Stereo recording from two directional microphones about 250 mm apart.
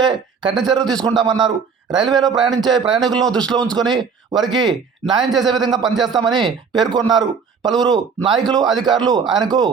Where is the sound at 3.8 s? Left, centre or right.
Centre.